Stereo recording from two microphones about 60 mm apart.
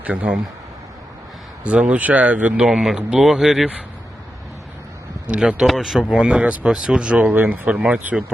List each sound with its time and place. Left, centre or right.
0.0 s speech: right
1.6 s speech: centre
5.2 s speech: centre
5.6 s speech: centre
6.0 s speech: centre